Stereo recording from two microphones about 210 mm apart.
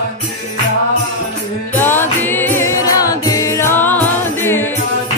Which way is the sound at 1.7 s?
10° left (ahead or behind).